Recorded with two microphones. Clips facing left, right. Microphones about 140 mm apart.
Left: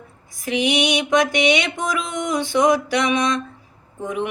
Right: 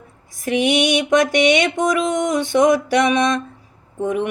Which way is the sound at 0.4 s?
50° right (ahead or behind).